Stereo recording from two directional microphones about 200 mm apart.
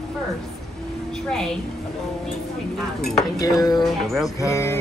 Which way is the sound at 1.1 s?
5° left (ahead or behind).